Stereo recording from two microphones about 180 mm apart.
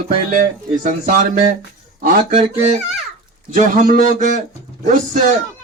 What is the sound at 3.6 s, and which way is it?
Speech, 45° right (ahead or behind).